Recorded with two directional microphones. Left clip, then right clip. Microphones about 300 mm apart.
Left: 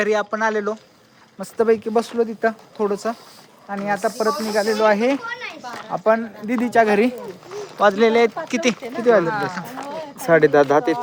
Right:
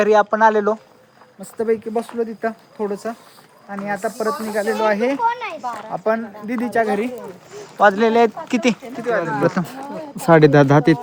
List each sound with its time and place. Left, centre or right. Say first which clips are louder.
0.0 s speech: right 6 dB; centre
1.4 s speech: left 3 dB; centre
5.2 s a child's voice: right 9 dB; centre
5.9 s speech: left 4 dB; centre
6.8 s speech: left 4 dB; centre
7.8 s speech: right 1 dB; centre
10.3 s speech: right 2 dB; right